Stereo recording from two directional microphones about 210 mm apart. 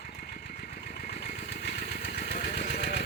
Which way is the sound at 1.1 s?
50° left (ahead or behind).